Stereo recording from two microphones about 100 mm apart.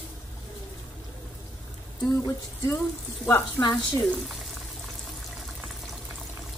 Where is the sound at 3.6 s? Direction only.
35° left (ahead or behind).